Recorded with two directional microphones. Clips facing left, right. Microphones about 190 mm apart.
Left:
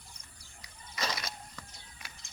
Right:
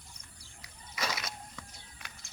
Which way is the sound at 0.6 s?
5° right (ahead or behind).